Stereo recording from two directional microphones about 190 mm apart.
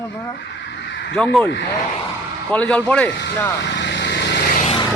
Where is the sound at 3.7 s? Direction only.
65° left (ahead or behind).